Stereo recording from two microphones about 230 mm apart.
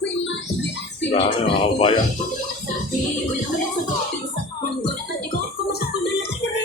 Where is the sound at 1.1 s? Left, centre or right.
Left.